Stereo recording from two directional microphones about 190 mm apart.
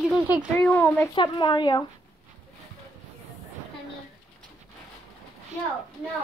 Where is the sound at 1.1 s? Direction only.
25° left (ahead or behind).